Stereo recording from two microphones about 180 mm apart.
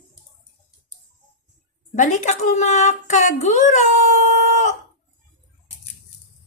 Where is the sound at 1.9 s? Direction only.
40° left (ahead or behind).